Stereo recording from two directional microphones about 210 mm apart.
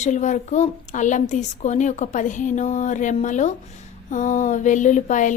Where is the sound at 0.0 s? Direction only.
35° left (ahead or behind).